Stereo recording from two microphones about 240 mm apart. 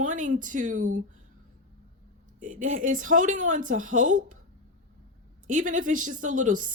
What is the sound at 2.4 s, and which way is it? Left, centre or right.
Speech, right.